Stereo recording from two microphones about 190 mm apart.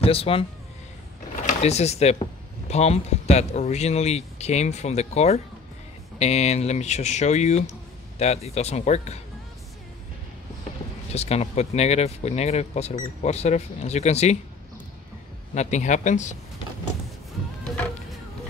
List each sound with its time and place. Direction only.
0.0 s a man's voice: 30° left (ahead or behind)
11.1 s speech: 35° left (ahead or behind)
15.5 s speech: 35° left (ahead or behind)